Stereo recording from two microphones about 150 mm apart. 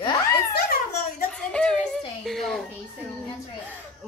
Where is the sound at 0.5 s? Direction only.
90° left.